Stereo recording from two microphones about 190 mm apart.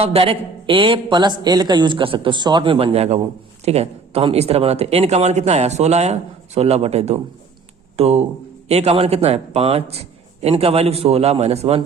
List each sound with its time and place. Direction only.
0.0 s a man's voice: 30° right (ahead or behind)